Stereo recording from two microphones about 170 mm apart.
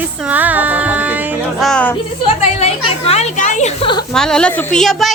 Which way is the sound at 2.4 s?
40° left (ahead or behind).